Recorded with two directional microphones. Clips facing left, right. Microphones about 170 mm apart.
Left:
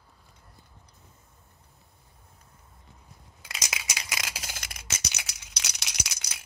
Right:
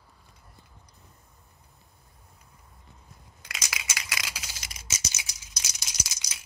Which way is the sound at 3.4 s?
25° left (ahead or behind).